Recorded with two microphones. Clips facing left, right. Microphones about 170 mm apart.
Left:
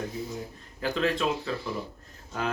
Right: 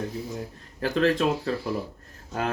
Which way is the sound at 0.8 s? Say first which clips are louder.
Right 4 dB; 45° right (ahead or behind).